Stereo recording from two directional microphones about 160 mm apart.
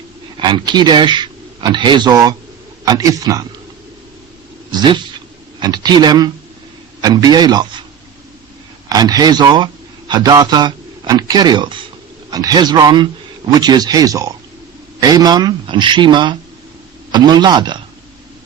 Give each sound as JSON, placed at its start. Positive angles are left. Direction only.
{"t": 0.3, "sound": "speech", "side_deg": -30}
{"t": 4.7, "sound": "speech", "side_deg": -25}
{"t": 8.9, "sound": "a man's voice", "side_deg": -25}